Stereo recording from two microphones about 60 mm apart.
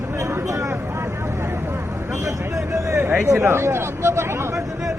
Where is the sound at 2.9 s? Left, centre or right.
Right.